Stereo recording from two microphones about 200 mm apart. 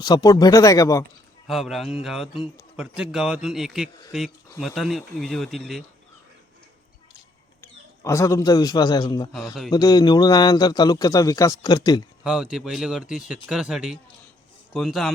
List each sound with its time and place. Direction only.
0.0 s speech: 20° left (ahead or behind)
1.5 s speech: centre (ahead or behind)
8.0 s a man's voice: 15° left (ahead or behind)
9.3 s speech: centre (ahead or behind)
9.7 s a man's voice: 20° left (ahead or behind)
12.2 s speech: 5° right (ahead or behind)